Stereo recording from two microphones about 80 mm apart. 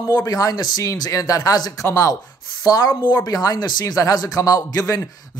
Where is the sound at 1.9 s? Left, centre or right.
Left.